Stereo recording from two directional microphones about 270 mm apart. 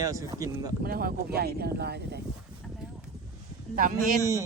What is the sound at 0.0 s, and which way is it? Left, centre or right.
Speech, centre.